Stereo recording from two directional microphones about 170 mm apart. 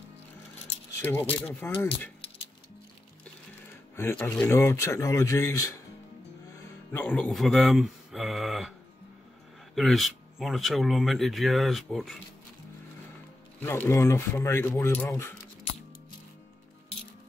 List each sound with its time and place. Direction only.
1.0 s speech: 10° left (ahead or behind)
3.9 s speech: 15° left (ahead or behind)
6.9 s speech: 5° left (ahead or behind)
9.8 s speech: centre (ahead or behind)
13.6 s speech: 10° left (ahead or behind)